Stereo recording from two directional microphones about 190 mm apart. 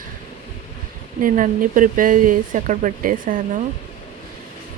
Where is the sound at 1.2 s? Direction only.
45° right (ahead or behind).